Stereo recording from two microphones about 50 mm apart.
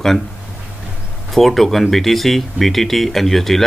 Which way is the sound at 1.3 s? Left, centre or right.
Centre.